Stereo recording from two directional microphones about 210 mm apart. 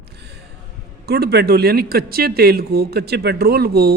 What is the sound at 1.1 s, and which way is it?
A man's voice, 50° right (ahead or behind).